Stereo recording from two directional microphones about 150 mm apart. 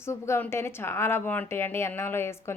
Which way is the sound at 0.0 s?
20° left (ahead or behind).